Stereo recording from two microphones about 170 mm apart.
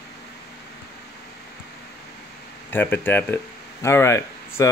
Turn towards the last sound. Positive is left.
turn(degrees=15)  # may be behind; listen again after turning